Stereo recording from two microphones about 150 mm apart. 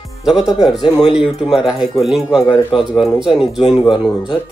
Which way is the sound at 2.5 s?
35° left (ahead or behind).